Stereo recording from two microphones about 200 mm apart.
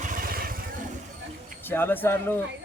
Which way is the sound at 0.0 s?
45° right (ahead or behind).